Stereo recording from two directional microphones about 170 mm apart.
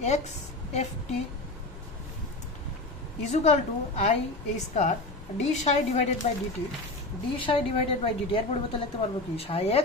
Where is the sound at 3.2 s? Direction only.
40° left (ahead or behind).